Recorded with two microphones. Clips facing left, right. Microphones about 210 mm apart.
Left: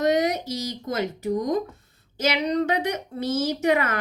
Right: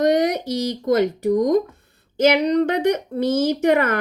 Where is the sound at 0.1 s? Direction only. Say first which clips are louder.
Right 4 dB; 60° right (ahead or behind).